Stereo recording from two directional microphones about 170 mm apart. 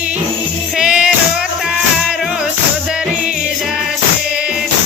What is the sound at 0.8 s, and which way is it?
Music, 5° right (ahead or behind).